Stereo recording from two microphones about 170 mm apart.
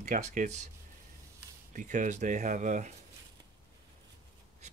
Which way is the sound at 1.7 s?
45° right (ahead or behind).